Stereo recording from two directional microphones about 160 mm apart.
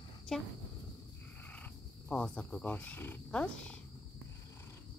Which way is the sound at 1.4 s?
10° left (ahead or behind).